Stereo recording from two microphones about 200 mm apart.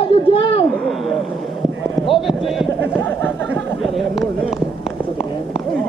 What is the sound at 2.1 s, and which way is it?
Clip-clop, centre (ahead or behind).